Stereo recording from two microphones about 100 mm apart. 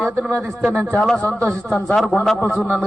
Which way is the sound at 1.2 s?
15° left (ahead or behind).